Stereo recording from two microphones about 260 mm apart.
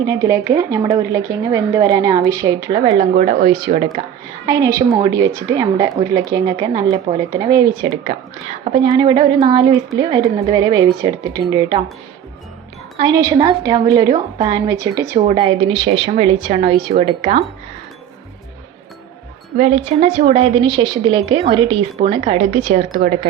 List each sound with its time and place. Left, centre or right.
0.0 s speech: centre
13.0 s a woman's voice: centre
19.5 s a woman's voice: right